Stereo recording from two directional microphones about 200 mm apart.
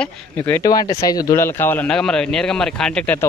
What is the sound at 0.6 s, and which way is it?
A man's voice, 20° left (ahead or behind).